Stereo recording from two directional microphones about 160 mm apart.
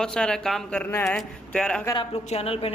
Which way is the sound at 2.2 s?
40° left (ahead or behind).